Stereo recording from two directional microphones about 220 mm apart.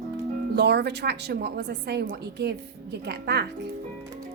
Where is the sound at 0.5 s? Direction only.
50° right (ahead or behind).